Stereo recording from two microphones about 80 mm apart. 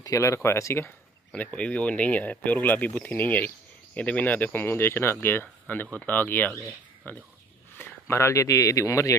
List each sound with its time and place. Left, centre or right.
0.0 s speech: left
1.3 s speech: centre; by 9.1 s left